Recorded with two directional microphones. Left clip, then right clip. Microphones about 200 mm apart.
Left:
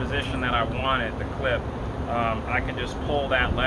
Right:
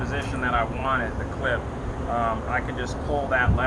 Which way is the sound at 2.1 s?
20° left (ahead or behind).